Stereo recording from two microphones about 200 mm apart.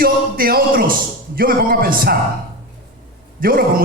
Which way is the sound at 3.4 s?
45° right (ahead or behind).